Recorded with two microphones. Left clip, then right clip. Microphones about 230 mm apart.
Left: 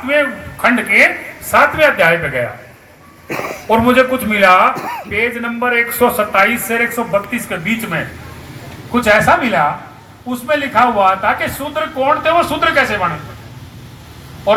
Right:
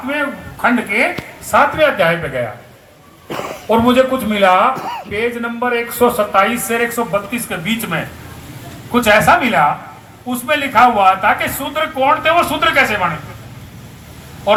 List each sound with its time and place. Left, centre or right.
0.1 s a man's voice: centre
3.2 s a man's voice: centre
14.5 s a man's voice: centre